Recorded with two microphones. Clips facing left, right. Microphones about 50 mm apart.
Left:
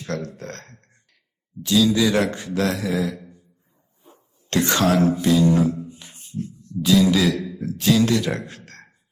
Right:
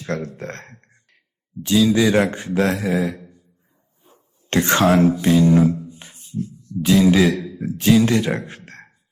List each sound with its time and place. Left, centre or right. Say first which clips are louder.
0.0 s speech: right 3 dB; right
4.4 s speech: right 3 dB; right
6.1 s a sound: right 3 dB; left
6.8 s a man's voice: right 2 dB; right